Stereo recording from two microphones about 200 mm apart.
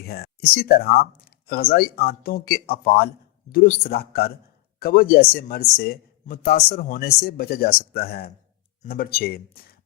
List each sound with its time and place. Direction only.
0.0 s speech: 50° left (ahead or behind)